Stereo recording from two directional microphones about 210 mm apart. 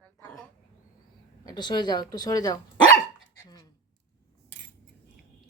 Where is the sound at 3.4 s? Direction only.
15° left (ahead or behind).